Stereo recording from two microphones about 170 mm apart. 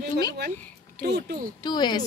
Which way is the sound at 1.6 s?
25° left (ahead or behind).